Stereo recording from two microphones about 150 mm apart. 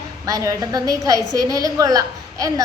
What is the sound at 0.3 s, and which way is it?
A woman's voice, 20° right (ahead or behind).